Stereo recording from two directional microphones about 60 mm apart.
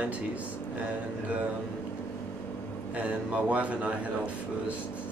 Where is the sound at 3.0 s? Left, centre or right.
Right.